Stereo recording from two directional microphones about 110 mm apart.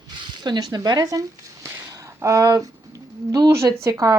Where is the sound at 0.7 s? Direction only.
35° right (ahead or behind).